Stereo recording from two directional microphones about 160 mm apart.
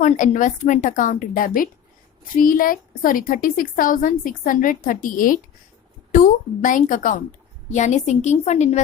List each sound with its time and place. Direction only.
0.0 s a woman's voice: 50° left (ahead or behind)